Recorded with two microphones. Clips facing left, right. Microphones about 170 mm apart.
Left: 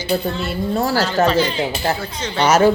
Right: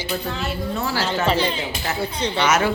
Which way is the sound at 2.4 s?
35° left (ahead or behind).